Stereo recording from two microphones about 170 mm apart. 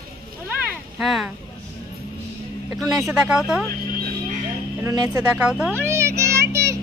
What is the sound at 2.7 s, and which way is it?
Speech, 5° right (ahead or behind).